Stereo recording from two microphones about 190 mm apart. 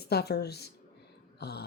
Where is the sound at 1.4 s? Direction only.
60° left (ahead or behind).